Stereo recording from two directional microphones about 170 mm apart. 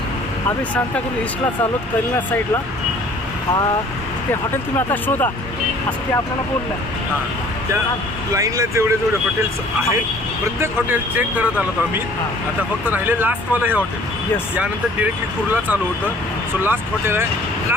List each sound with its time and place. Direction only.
4.3 s speech: 10° left (ahead or behind)
8.4 s speech: 20° right (ahead or behind)
12.8 s speech: 10° right (ahead or behind)
16.6 s speech: 15° right (ahead or behind)